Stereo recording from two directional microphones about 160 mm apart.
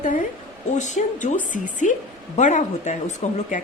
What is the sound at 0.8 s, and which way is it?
Speech, 50° left (ahead or behind).